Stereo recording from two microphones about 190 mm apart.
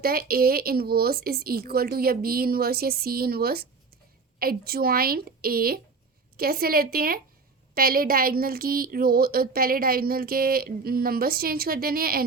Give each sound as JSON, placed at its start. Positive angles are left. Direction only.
{"t": 0.0, "sound": "speech", "side_deg": -50}